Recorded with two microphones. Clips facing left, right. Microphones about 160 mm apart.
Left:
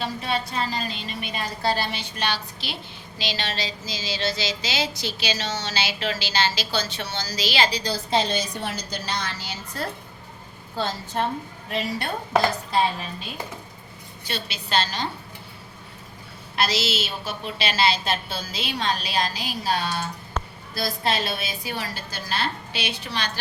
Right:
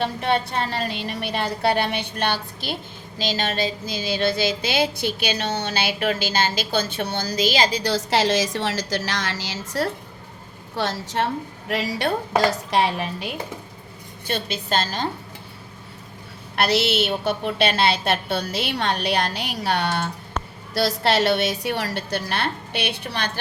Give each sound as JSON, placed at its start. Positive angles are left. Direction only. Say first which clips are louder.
{"t": 0.0, "sound": "a sound", "louder": "right 5 dB", "side_deg": -60}
{"t": 7.9, "sound": "a woman's voice", "louder": "right 4 dB", "side_deg": -90}
{"t": 11.7, "sound": "dishes", "louder": "right 4 dB", "side_deg": -90}
{"t": 14.3, "sound": "a woman's voice", "louder": "right 5 dB", "side_deg": -50}
{"t": 16.6, "sound": "a sound", "louder": "right 5 dB", "side_deg": -60}
{"t": 20.7, "sound": "a woman's voice", "louder": "right 6 dB", "side_deg": -75}